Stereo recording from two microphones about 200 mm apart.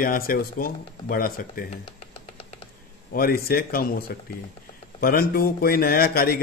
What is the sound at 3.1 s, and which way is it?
A man's voice, 45° left (ahead or behind).